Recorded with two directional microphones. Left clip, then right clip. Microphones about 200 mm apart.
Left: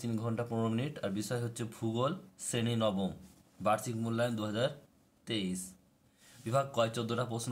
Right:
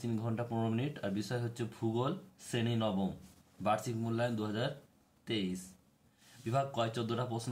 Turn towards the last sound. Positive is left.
turn(degrees=20)  # may be behind; listen again after turning